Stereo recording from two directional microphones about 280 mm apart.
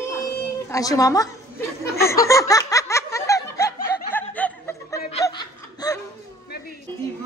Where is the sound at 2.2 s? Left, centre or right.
Centre.